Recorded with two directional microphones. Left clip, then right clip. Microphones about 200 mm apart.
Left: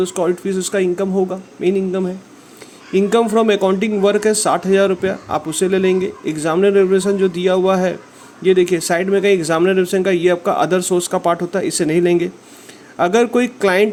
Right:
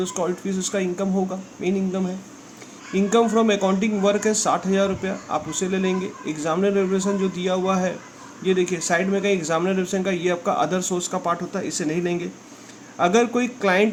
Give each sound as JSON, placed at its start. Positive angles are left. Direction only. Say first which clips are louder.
{"t": 0.0, "sound": "speech", "louder": "left 7 dB", "side_deg": 25}